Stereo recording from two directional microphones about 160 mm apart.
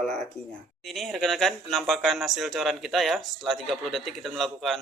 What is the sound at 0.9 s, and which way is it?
Speech, centre (ahead or behind).